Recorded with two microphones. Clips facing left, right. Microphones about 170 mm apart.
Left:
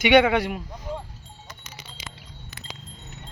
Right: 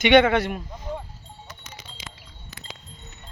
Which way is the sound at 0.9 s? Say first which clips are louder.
Even; 10° left (ahead or behind).